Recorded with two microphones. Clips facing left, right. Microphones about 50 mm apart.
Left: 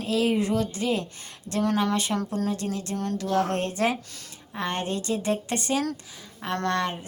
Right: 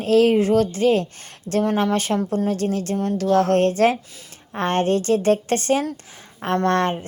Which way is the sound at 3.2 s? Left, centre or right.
Right.